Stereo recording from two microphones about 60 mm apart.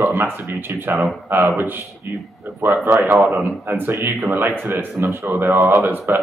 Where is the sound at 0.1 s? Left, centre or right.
Right.